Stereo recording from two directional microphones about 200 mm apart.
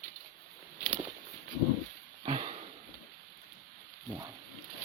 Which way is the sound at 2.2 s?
30° right (ahead or behind).